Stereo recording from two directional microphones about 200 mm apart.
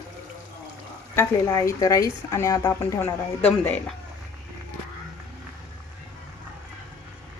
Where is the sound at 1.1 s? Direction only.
15° left (ahead or behind).